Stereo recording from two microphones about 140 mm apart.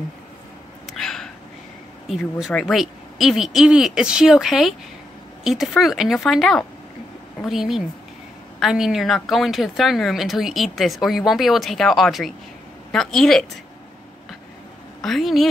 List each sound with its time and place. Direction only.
0.9 s a sound: 5° left (ahead or behind)
2.4 s a woman's voice: centre (ahead or behind)
15.0 s a woman's voice: centre (ahead or behind)